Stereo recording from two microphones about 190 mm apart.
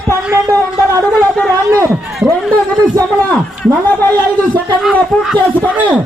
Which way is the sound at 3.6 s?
10° left (ahead or behind).